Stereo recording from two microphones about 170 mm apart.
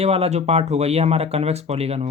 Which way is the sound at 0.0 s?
35° right (ahead or behind).